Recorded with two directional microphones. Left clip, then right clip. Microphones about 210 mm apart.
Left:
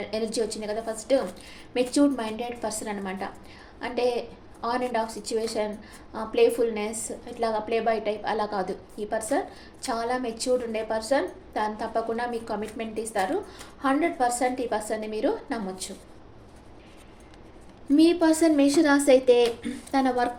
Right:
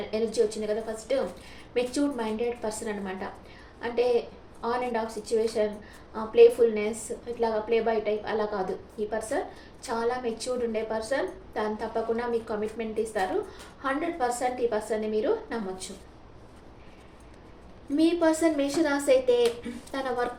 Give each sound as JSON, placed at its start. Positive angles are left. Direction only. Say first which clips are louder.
{"t": 0.1, "sound": "a woman's voice", "louder": "right 3 dB", "side_deg": 50}
{"t": 4.6, "sound": "a woman's voice", "louder": "left 2 dB", "side_deg": 50}
{"t": 17.9, "sound": "a woman's voice", "louder": "left 3 dB", "side_deg": 50}